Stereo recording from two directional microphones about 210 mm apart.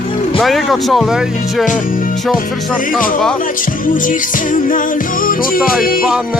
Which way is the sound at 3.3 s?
40° left (ahead or behind).